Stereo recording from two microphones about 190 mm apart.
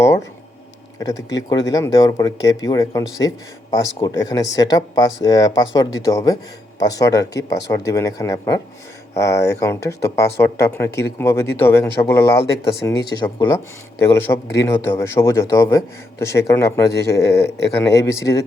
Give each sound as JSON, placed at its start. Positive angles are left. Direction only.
{"t": 0.0, "sound": "speech", "side_deg": 15}
{"t": 12.2, "sound": "speech", "side_deg": 60}
{"t": 12.8, "sound": "speech", "side_deg": 20}